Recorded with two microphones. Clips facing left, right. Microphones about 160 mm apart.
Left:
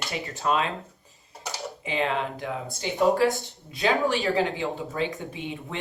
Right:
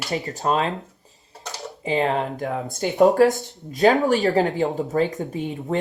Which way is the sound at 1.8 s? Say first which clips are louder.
Right 6 dB; 40° right (ahead or behind).